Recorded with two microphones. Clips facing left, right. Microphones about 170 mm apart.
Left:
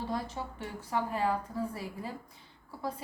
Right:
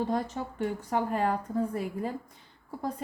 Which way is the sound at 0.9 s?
50° right (ahead or behind).